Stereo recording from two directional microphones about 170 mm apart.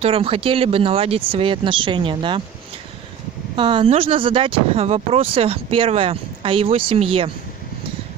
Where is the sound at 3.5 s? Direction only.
30° right (ahead or behind).